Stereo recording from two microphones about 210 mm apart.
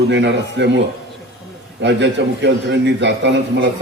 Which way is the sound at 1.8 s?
55° right (ahead or behind).